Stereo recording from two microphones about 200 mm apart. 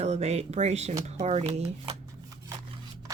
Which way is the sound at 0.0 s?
35° right (ahead or behind).